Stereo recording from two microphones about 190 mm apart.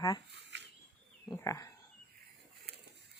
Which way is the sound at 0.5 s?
65° right (ahead or behind).